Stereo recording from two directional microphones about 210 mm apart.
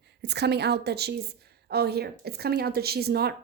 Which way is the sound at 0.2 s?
50° right (ahead or behind).